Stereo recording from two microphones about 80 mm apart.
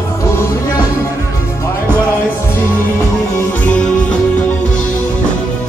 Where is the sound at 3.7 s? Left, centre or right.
Centre.